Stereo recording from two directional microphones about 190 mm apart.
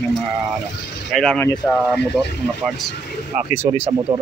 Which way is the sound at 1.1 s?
5° left (ahead or behind).